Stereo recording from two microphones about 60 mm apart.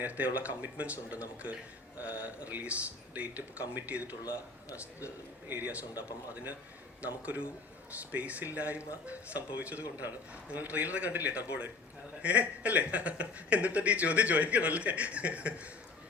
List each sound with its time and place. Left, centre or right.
0.0 s speech: right
5.5 s speech: right